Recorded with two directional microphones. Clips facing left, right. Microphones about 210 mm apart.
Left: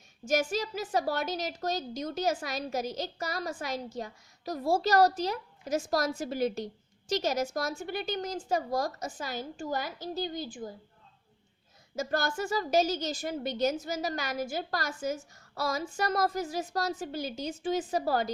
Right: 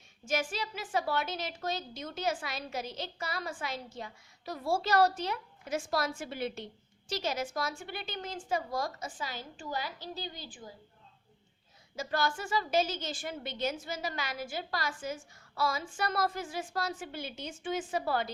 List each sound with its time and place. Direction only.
0.3 s a woman's voice: 40° left (ahead or behind)
11.9 s a woman's voice: 45° left (ahead or behind)